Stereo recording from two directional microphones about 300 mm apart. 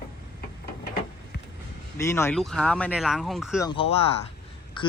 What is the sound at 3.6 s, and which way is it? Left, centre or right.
Speech, centre.